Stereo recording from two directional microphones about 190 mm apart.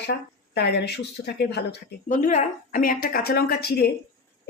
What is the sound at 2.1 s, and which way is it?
A woman's voice, 45° left (ahead or behind).